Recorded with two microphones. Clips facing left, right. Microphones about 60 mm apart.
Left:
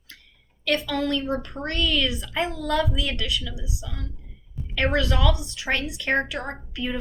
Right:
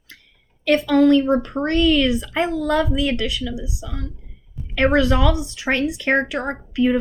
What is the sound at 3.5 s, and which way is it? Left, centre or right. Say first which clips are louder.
Speech: right 8 dB; right.